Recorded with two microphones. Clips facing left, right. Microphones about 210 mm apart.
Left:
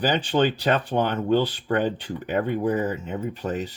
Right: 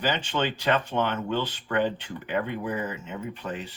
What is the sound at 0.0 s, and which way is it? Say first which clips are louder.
Speech: left 6 dB; 35° left (ahead or behind).